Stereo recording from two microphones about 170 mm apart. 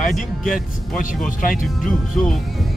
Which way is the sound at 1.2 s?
55° left (ahead or behind).